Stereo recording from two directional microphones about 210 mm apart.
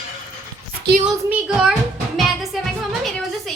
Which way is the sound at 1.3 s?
5° right (ahead or behind).